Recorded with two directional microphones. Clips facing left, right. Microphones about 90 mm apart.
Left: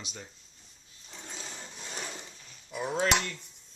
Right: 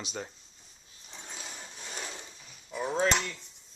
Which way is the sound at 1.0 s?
15° right (ahead or behind).